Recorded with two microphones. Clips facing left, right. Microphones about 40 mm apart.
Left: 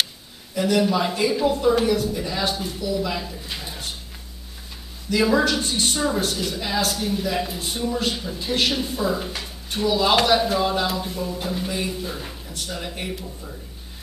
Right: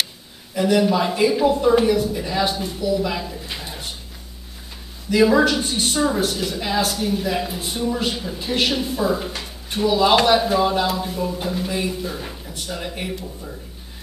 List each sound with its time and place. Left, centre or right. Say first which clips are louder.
0.6 s a man's voice: right 2 dB; centre
5.1 s speech: right 4 dB; centre